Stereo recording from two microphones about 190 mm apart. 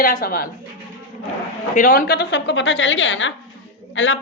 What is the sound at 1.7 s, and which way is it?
A woman's voice, 50° left (ahead or behind).